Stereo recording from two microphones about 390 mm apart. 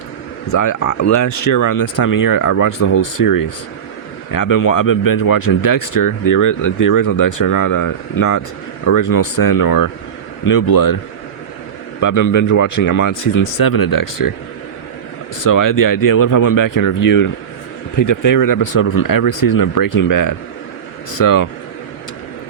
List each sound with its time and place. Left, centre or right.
0.4 s a man's voice: left
11.9 s speech: left
15.4 s speech: left